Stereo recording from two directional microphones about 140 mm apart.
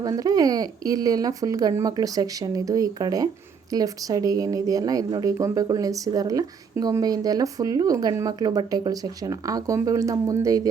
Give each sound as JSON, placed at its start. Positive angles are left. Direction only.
{"t": 0.0, "sound": "a woman's voice", "side_deg": -25}